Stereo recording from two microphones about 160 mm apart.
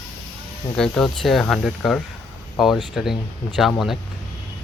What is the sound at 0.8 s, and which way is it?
Speech, 5° left (ahead or behind).